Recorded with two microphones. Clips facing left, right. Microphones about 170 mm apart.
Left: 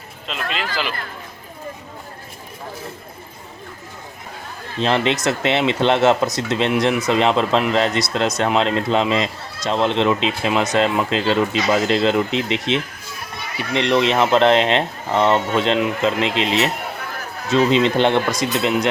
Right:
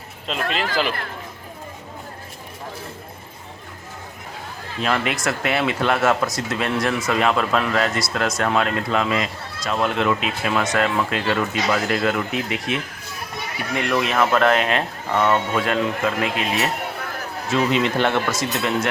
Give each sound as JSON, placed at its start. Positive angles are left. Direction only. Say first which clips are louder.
{"t": 0.3, "sound": "speech", "louder": "right 2 dB", "side_deg": -40}
{"t": 4.8, "sound": "speech", "louder": "left 4 dB", "side_deg": 25}